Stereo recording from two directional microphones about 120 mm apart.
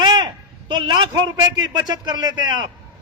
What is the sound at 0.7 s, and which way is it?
A man's voice, 40° right (ahead or behind).